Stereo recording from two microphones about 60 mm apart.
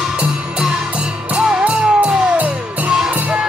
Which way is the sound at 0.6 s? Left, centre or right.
Centre.